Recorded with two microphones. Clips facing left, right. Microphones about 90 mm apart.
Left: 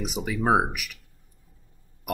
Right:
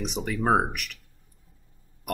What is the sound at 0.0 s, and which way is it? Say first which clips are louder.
Speech: left 1 dB; 5° left (ahead or behind).